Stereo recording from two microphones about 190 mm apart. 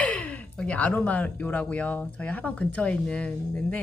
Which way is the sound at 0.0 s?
5° left (ahead or behind).